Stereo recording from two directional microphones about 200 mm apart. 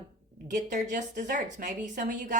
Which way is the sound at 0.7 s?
40° right (ahead or behind).